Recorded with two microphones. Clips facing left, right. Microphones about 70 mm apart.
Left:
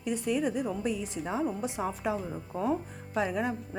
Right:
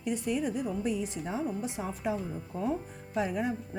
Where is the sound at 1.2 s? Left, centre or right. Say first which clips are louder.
Left 2 dB; left.